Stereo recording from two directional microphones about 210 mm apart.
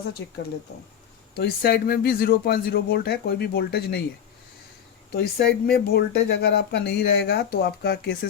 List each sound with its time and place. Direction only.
1.4 s speech: 45° left (ahead or behind)
5.1 s speech: 50° left (ahead or behind)